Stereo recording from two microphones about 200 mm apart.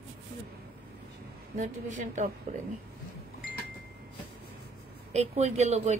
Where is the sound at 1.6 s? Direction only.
40° right (ahead or behind).